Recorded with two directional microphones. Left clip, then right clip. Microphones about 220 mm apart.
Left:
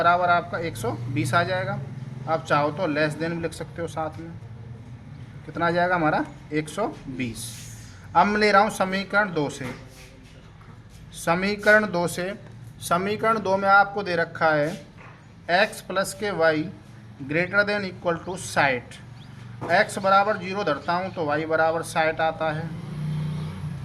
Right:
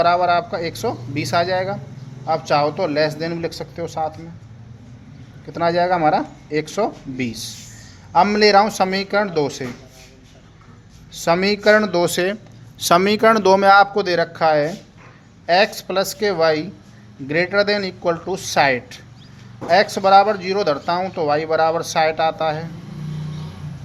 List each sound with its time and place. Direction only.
0.0 s a man's voice: 30° right (ahead or behind)
5.5 s a man's voice: 25° right (ahead or behind)
11.3 s speech: 30° right (ahead or behind)
12.8 s speech: 45° right (ahead or behind)